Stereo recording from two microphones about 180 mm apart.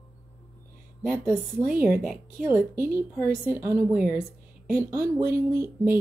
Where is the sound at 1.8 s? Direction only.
10° right (ahead or behind).